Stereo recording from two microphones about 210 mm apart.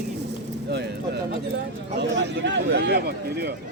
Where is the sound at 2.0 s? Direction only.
55° right (ahead or behind).